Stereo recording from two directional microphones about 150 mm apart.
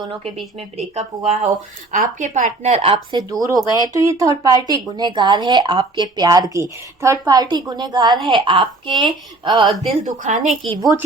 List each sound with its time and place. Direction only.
0.8 s a woman's voice: 45° right (ahead or behind)
3.1 s speech: 25° right (ahead or behind)
10.0 s speech: 55° right (ahead or behind)
10.7 s speech: 25° right (ahead or behind)